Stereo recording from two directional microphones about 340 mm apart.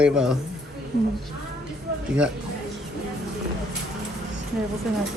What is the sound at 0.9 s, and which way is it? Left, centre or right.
Speech, right.